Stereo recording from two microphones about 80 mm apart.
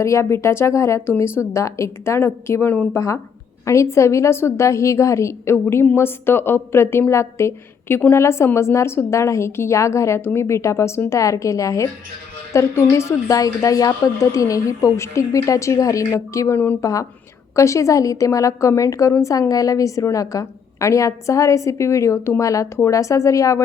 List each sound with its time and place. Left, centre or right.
0.0 s a woman's voice: left